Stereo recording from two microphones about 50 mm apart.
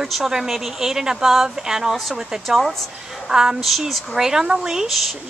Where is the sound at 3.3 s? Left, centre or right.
Centre.